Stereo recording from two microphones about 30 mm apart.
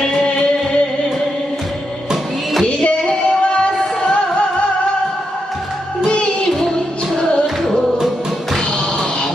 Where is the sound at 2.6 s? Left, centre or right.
Left.